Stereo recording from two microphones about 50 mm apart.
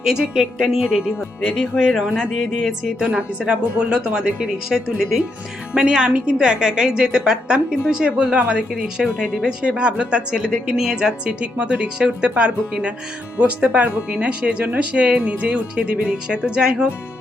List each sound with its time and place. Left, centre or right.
0.0 s a woman's voice: centre
1.7 s speech: left
2.3 s speech: centre
3.0 s a woman's voice: right
8.0 s a woman's voice: right
11.3 s speech: right